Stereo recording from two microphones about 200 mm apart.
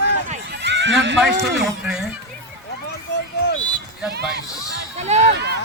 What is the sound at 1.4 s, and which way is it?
Speech, 60° right (ahead or behind).